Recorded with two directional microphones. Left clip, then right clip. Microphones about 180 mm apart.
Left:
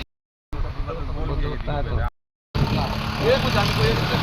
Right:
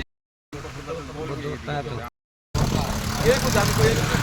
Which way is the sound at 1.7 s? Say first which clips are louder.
Left 1 dB; 25° left (ahead or behind).